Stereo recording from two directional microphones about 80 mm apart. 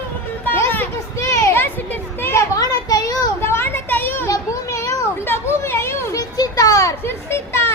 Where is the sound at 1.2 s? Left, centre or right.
Left.